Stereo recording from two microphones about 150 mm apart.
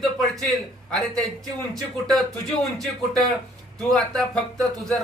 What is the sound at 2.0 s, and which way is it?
Speech, centre (ahead or behind).